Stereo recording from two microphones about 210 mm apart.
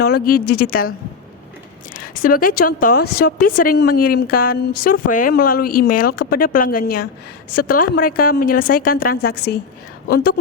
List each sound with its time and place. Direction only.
0.0 s speech: 45° left (ahead or behind)
2.2 s speech: 40° left (ahead or behind)